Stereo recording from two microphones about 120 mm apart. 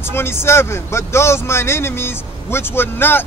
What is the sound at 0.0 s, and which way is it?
Speech, 20° left (ahead or behind).